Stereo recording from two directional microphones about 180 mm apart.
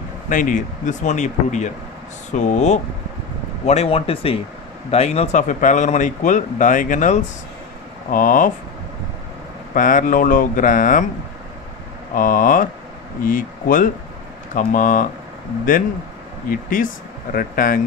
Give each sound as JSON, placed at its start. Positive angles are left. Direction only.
{"t": 0.3, "sound": "speech", "side_deg": 45}
{"t": 9.8, "sound": "speech", "side_deg": 45}
{"t": 12.2, "sound": "speech", "side_deg": 50}
{"t": 16.4, "sound": "speech", "side_deg": 50}